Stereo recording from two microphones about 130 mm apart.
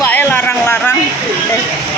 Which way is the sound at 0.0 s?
15° left (ahead or behind).